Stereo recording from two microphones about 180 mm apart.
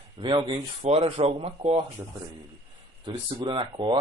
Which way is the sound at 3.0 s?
25° right (ahead or behind).